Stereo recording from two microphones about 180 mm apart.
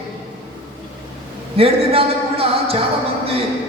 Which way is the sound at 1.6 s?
30° right (ahead or behind).